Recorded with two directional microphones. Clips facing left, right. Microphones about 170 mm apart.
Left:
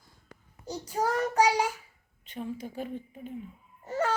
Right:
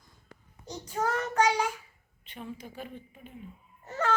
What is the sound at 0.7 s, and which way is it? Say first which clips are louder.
Child singing: left 2 dB; 30° left (ahead or behind).